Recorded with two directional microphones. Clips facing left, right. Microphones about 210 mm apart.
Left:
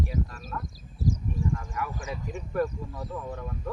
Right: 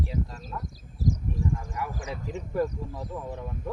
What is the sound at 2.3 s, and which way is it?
Speech, 20° right (ahead or behind).